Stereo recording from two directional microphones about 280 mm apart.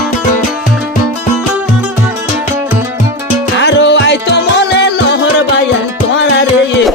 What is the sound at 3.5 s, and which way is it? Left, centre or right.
Music, left.